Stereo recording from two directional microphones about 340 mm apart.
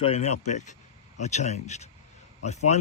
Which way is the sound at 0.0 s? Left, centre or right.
Centre.